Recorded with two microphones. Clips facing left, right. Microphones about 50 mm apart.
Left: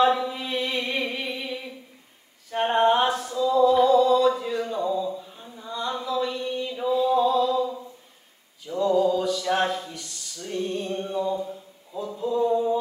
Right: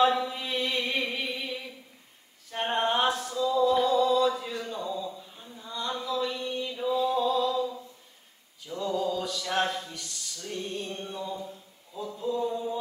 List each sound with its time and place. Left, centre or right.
0.0 s mantra: centre
0.7 s music: centre
1.0 s music: centre
2.5 s a sound: centre
5.9 s mantra: centre
8.6 s mantra: centre
9.1 s a sound: centre
10.9 s mantra: left